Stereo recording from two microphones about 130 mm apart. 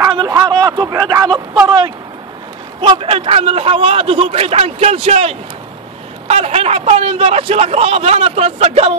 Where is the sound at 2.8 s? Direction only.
45° right (ahead or behind).